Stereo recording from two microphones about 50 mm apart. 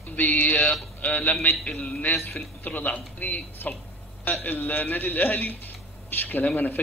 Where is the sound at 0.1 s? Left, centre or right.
Left.